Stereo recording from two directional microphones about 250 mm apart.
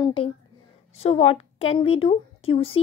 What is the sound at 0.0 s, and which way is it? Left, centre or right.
A woman's voice, centre.